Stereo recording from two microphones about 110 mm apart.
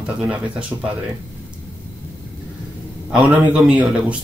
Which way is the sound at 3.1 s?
10° right (ahead or behind).